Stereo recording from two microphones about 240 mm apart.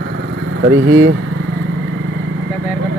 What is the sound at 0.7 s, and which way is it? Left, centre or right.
Speech, right.